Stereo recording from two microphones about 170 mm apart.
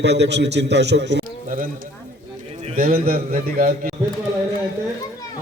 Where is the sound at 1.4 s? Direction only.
55° right (ahead or behind).